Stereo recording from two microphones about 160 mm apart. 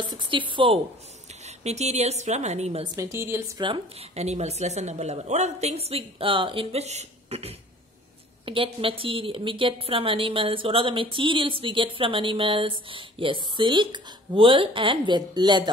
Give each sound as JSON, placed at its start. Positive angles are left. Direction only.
{"t": 0.1, "sound": "a woman's voice", "side_deg": -30}
{"t": 1.6, "sound": "a woman's voice", "side_deg": -45}
{"t": 3.0, "sound": "a woman's voice", "side_deg": -15}
{"t": 3.6, "sound": "a woman's voice", "side_deg": -35}